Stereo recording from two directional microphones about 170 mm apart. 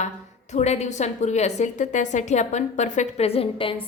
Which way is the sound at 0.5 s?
40° left (ahead or behind).